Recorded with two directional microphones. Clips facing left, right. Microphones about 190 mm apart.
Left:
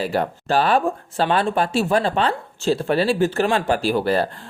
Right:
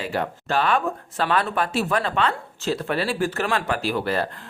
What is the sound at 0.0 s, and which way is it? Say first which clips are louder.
Speech: left 4 dB; 35° left (ahead or behind).